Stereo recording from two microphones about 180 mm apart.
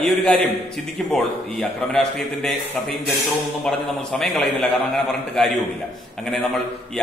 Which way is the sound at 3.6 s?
Centre (ahead or behind).